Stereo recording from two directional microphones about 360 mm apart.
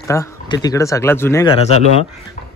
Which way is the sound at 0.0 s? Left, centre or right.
Centre.